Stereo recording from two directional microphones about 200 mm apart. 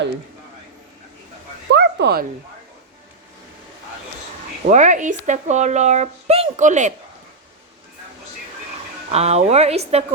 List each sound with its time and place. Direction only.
1.7 s bow-wow: 55° right (ahead or behind)
4.6 s speech: 35° right (ahead or behind)
9.1 s speech: 30° right (ahead or behind)